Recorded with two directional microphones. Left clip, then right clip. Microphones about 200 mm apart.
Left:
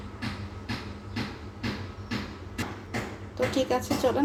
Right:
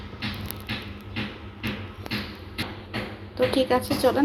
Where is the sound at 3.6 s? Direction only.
Centre (ahead or behind).